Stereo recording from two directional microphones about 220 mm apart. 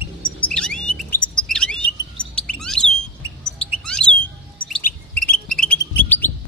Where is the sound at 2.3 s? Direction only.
5° left (ahead or behind).